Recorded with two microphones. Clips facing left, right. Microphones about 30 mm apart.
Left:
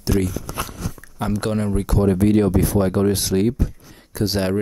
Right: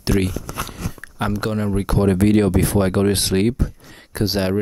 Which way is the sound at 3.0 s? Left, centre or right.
Right.